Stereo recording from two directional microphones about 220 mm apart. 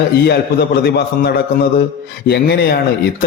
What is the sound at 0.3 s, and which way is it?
A man's voice, 45° left (ahead or behind).